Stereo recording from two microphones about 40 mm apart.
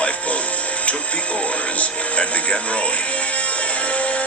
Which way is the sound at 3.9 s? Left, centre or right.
Left.